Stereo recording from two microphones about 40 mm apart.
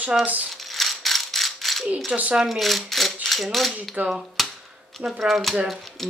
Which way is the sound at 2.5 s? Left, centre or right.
Centre.